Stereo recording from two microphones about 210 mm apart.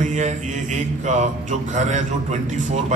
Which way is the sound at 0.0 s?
35° right (ahead or behind).